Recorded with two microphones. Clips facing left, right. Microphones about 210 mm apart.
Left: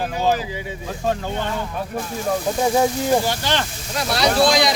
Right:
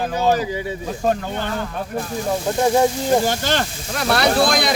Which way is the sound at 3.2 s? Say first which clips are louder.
Right 2 dB; 45° right (ahead or behind).